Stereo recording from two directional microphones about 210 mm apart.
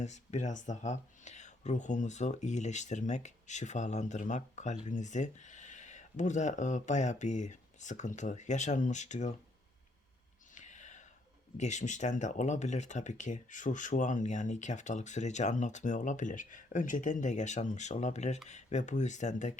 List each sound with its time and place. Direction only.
0.0 s speech: 35° left (ahead or behind)
10.5 s whispering: 35° left (ahead or behind)
11.5 s speech: 35° left (ahead or behind)